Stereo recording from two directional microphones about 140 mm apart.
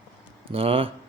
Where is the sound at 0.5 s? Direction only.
40° right (ahead or behind).